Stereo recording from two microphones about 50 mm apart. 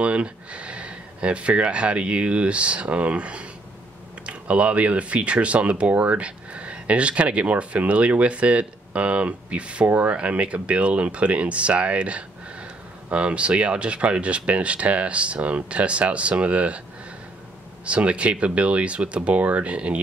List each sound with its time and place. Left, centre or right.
0.0 s speech: right
17.8 s speech: right